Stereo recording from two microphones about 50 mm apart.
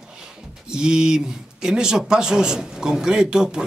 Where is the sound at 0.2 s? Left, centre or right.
Centre.